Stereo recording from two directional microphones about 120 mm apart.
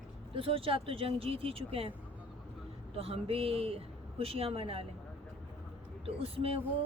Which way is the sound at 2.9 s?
50° right (ahead or behind).